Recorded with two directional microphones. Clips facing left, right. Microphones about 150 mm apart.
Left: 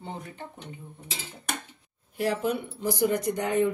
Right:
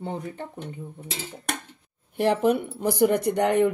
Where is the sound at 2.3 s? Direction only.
55° right (ahead or behind).